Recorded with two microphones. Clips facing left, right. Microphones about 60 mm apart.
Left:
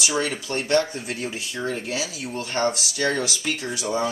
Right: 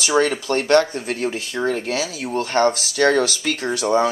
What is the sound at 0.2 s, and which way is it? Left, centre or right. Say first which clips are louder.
Speech: right 7 dB; right.